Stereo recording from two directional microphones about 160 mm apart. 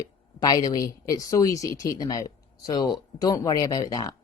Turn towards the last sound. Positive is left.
turn(degrees=25)  # may be behind; listen again after turning